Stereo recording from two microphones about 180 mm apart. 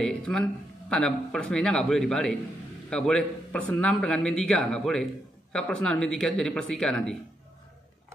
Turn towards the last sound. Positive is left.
turn(degrees=5)  # may be behind; listen again after turning